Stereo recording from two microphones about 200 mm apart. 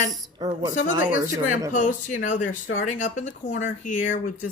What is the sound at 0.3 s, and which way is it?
Speech, 25° right (ahead or behind).